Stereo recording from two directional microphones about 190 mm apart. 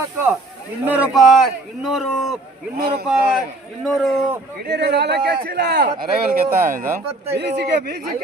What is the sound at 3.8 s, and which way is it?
Speech, centre (ahead or behind).